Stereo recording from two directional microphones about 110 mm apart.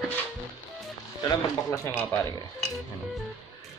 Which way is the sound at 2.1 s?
35° left (ahead or behind).